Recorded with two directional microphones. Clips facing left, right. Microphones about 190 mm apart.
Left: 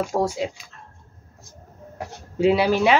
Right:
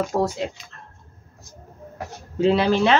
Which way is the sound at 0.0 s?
10° left (ahead or behind).